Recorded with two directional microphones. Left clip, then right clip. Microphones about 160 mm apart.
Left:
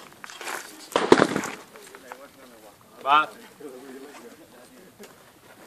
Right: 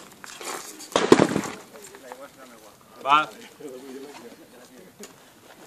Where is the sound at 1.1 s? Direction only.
10° right (ahead or behind).